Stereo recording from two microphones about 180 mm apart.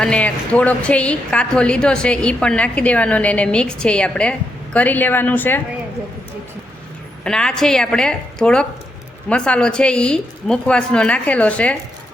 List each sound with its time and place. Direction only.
0.0 s a woman's voice: 5° left (ahead or behind)
7.3 s a woman's voice: 5° left (ahead or behind)